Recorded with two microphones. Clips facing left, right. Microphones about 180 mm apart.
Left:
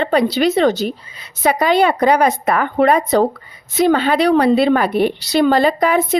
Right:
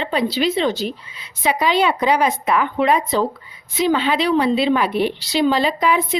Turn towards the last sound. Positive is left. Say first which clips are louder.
# left 4 dB
turn(degrees=50)  # may be behind; listen again after turning